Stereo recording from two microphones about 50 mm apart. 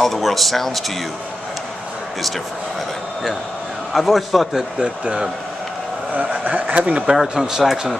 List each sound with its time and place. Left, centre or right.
0.0 s speech: centre
3.9 s speech: centre
4.7 s speech: centre
6.4 s speech: right
7.1 s speech: centre